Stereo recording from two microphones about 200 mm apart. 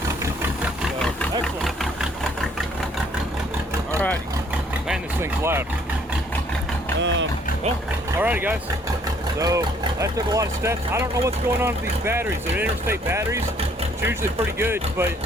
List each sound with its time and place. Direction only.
0.2 s engine: 10° right (ahead or behind)
5.2 s speech: 10° right (ahead or behind)
7.0 s vehicle: 65° right (ahead or behind)
8.2 s speech: 10° right (ahead or behind)